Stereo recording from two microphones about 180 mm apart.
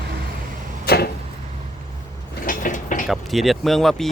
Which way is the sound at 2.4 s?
50° left (ahead or behind).